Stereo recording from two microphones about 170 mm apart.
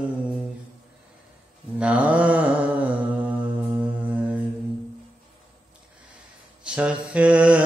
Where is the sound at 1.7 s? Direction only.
10° right (ahead or behind).